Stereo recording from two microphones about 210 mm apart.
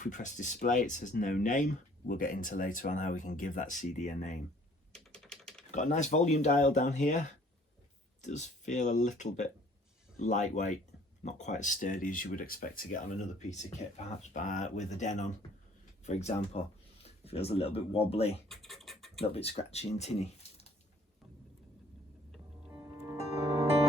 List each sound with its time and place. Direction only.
0.0 s speech: 35° left (ahead or behind)
5.1 s typing: centre (ahead or behind)
5.7 s speech: 35° left (ahead or behind)
18.4 s a sound: centre (ahead or behind)
19.2 s speech: 30° left (ahead or behind)
22.7 s music: 15° right (ahead or behind)